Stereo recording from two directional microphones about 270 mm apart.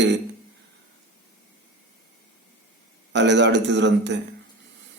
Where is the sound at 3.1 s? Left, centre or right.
Right.